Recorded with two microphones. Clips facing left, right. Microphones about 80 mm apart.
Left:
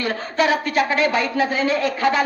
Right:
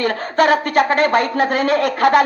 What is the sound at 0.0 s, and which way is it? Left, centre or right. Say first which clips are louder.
A woman's voice: right 5 dB; right.